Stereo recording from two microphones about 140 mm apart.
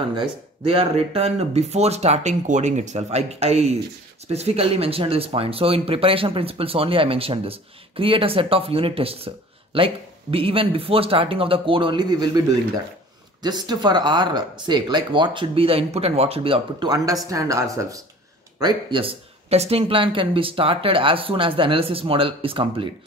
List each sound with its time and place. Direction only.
0.1 s speech: 40° right (ahead or behind)